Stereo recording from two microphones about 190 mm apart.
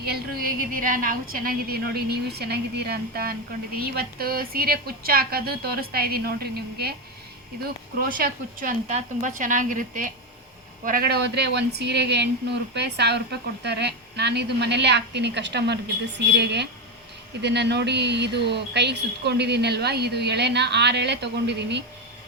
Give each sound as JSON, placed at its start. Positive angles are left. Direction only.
{"t": 0.0, "sound": "a woman's voice", "side_deg": -55}